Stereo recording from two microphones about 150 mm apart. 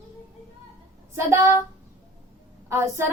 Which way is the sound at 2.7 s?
20° right (ahead or behind).